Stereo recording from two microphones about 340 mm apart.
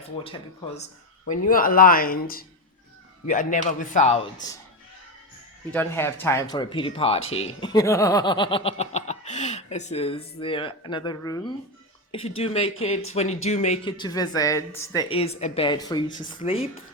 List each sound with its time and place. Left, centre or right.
0.3 s a man's voice: centre
5.7 s speech: centre